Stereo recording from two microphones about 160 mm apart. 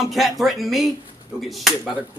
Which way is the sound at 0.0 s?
Centre (ahead or behind).